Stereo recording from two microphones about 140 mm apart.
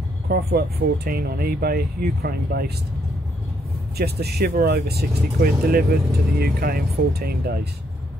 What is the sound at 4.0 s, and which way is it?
Speech, 90° right.